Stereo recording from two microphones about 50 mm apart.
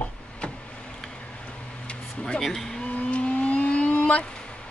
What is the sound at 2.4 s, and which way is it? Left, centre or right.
Speech, centre.